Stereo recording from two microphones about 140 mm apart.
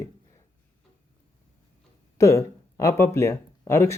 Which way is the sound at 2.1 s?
20° left (ahead or behind).